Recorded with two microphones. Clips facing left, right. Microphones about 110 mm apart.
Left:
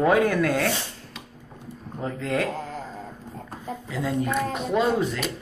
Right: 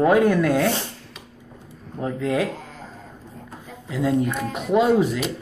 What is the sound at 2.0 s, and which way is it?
Speech, 5° right (ahead or behind).